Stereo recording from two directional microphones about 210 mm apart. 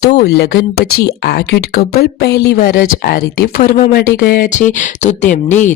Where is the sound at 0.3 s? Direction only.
50° left (ahead or behind).